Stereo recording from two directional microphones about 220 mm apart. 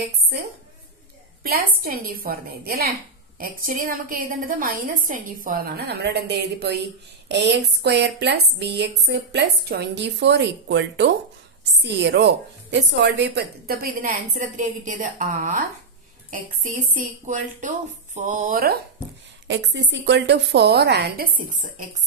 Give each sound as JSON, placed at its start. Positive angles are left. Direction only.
{"t": 1.4, "sound": "a woman's voice", "side_deg": -40}
{"t": 19.4, "sound": "speech", "side_deg": -55}